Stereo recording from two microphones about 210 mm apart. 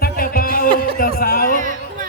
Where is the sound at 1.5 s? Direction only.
40° right (ahead or behind).